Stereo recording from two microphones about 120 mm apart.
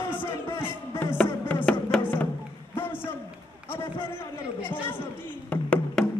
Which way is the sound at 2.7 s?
20° left (ahead or behind).